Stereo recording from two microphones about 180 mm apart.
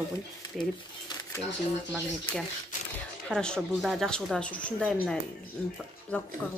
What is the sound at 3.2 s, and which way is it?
Speech, 5° left (ahead or behind).